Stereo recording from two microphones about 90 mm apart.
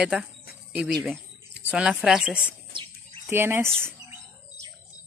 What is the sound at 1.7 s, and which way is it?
Speech, 5° right (ahead or behind).